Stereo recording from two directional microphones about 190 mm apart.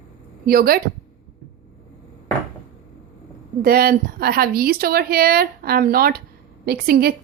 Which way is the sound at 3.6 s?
50° right (ahead or behind).